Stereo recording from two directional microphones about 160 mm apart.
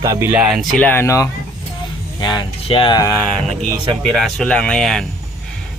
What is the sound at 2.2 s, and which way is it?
Speech, 30° left (ahead or behind).